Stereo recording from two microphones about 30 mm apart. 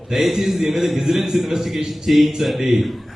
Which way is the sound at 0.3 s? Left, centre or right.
Centre.